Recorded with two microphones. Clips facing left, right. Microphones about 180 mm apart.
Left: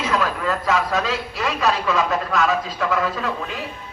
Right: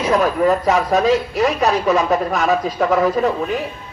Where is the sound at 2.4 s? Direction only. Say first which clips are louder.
Right 5 dB; 45° right (ahead or behind).